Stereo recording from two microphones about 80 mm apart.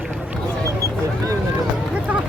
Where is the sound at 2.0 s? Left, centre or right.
Centre.